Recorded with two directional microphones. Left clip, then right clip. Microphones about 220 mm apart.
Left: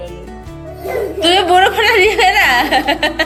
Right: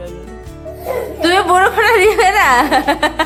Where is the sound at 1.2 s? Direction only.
20° right (ahead or behind).